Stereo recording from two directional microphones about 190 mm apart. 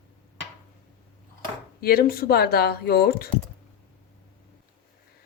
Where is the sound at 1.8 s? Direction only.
55° left (ahead or behind).